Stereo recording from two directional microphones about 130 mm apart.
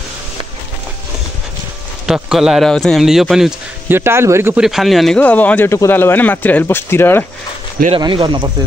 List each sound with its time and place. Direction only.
2.0 s speech: 5° right (ahead or behind)
3.9 s speech: 20° right (ahead or behind)
4.6 s speech: centre (ahead or behind); by 7.2 s 15° left (ahead or behind)
8.0 s speech: 40° right (ahead or behind)